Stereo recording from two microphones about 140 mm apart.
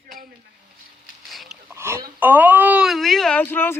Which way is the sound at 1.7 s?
15° right (ahead or behind).